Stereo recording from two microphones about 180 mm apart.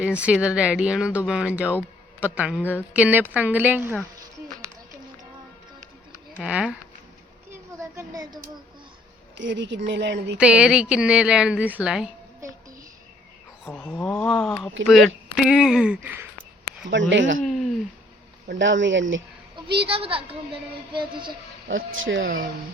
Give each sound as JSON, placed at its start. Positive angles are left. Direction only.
{"t": 0.0, "sound": "a woman's voice", "side_deg": -5}
{"t": 6.3, "sound": "a woman's voice", "side_deg": -5}
{"t": 7.5, "sound": "a sound", "side_deg": -15}
{"t": 9.4, "sound": "a woman's voice", "side_deg": -85}
{"t": 10.3, "sound": "a woman's voice", "side_deg": -5}
{"t": 13.7, "sound": "a woman's voice", "side_deg": 10}
{"t": 16.9, "sound": "speech", "side_deg": -90}
{"t": 17.4, "sound": "a sound", "side_deg": 0}
{"t": 18.4, "sound": "speech", "side_deg": -90}
{"t": 19.7, "sound": "speech", "side_deg": -30}
{"t": 21.7, "sound": "speech", "side_deg": -90}
{"t": 22.2, "sound": "speech", "side_deg": -50}